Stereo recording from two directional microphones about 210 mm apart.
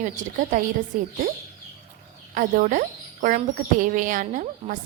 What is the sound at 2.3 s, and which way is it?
A woman's voice, 40° right (ahead or behind).